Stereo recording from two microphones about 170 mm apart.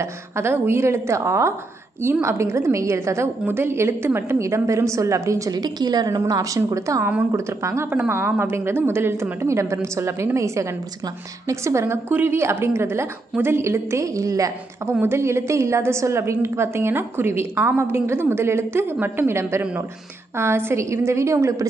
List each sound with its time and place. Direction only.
0.0 s a woman's voice: 15° right (ahead or behind)